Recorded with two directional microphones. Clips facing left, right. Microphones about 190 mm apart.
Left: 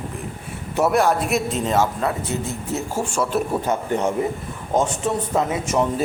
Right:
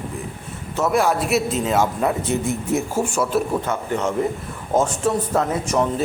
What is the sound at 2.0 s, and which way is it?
Speech, 15° right (ahead or behind).